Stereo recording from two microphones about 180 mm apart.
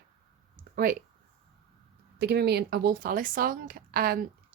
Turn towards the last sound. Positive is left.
turn(degrees=-55)  # may be behind; listen again after turning